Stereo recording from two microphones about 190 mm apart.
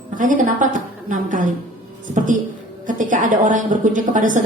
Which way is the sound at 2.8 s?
45° right (ahead or behind).